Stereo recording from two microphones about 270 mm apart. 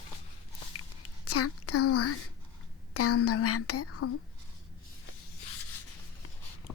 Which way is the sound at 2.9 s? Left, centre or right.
Left.